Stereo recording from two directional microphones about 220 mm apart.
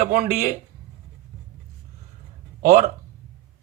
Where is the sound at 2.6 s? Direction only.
40° right (ahead or behind).